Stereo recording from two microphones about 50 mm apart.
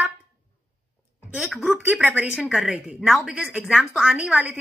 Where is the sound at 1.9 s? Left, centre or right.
Right.